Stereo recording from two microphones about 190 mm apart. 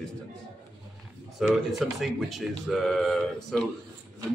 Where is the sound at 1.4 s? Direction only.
Centre (ahead or behind).